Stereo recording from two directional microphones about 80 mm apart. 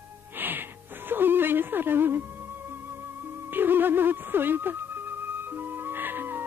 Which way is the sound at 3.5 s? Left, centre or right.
Right.